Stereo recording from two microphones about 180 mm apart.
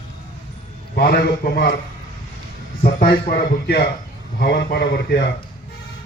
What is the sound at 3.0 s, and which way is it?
A man's voice, 65° left (ahead or behind).